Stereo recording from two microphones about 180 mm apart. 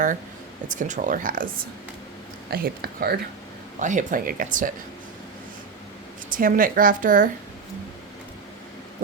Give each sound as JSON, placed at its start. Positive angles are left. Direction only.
{"t": 0.7, "sound": "speech", "side_deg": -45}
{"t": 2.5, "sound": "speech", "side_deg": -60}
{"t": 3.8, "sound": "speech", "side_deg": -45}
{"t": 6.3, "sound": "speech", "side_deg": -50}